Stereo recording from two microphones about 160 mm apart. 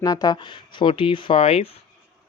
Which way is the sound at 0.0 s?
25° left (ahead or behind).